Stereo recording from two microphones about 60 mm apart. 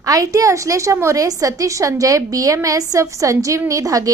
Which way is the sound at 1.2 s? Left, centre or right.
Right.